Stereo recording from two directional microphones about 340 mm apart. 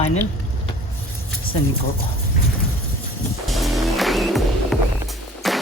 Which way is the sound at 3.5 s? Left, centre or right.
Centre.